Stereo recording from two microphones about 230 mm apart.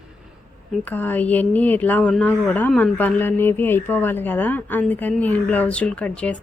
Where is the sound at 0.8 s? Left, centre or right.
Centre.